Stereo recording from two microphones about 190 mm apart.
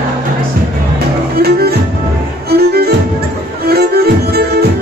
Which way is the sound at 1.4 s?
55° right (ahead or behind).